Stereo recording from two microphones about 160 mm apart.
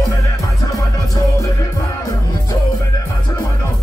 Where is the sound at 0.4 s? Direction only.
25° left (ahead or behind).